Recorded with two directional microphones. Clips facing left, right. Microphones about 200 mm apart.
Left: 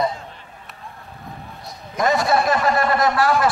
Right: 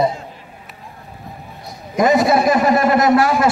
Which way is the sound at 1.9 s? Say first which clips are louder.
Right 5 dB; 20° right (ahead or behind).